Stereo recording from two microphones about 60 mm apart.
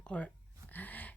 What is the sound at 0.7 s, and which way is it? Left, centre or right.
Gasp, left.